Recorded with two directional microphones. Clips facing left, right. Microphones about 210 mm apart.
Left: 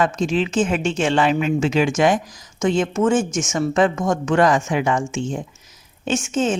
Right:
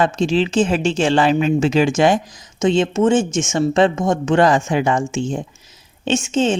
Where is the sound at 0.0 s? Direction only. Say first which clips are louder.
Right 3 dB; 30° right (ahead or behind).